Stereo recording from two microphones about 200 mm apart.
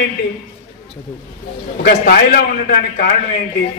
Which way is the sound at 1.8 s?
45° left (ahead or behind).